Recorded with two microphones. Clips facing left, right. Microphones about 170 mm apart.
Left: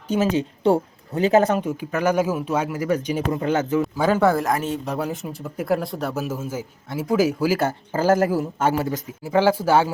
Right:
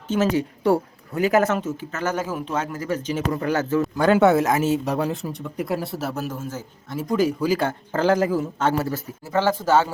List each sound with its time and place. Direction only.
0.3 s speech: 20° left (ahead or behind)
1.6 s speech: 15° left (ahead or behind)
3.9 s speech: centre (ahead or behind)